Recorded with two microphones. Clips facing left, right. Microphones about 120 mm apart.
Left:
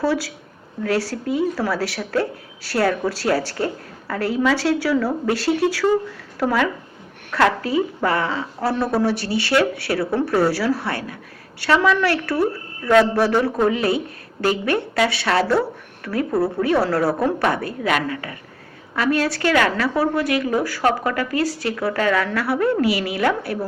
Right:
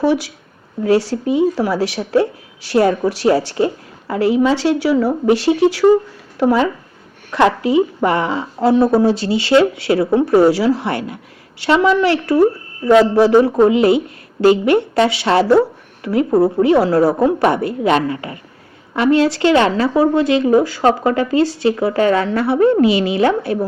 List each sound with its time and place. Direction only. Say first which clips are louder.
0.0 s a woman's voice: right 5 dB; 15° right (ahead or behind)